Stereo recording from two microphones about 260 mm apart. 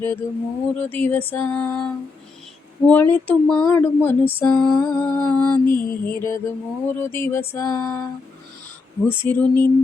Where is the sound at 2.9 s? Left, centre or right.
Centre.